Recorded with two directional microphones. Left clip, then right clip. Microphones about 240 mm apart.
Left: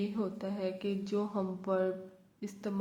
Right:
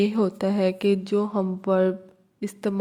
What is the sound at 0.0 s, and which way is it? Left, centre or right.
Speech, right.